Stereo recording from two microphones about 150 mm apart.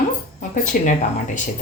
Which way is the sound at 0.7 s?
70° left (ahead or behind).